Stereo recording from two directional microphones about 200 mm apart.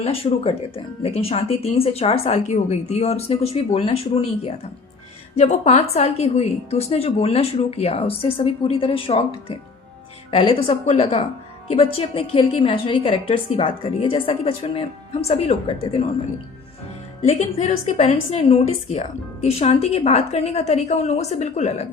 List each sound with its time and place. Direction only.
0.0 s a woman's voice: 30° left (ahead or behind)
17.2 s a woman's voice: 35° left (ahead or behind)